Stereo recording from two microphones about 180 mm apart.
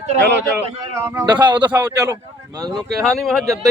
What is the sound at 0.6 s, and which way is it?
Speech, 15° right (ahead or behind).